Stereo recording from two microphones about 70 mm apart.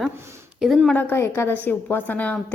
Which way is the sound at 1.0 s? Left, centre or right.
Left.